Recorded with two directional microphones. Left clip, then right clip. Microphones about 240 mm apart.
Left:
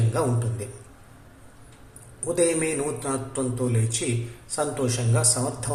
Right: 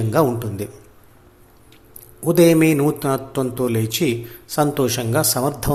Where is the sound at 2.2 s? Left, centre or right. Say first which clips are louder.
Right 9 dB; right.